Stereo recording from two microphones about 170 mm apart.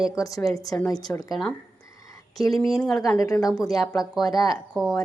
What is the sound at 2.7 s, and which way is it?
Speech, centre (ahead or behind).